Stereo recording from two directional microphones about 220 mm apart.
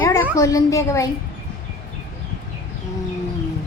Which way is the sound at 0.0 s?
10° left (ahead or behind).